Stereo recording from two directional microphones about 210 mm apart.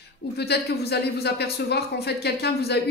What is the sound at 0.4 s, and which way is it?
A man's voice, 50° left (ahead or behind).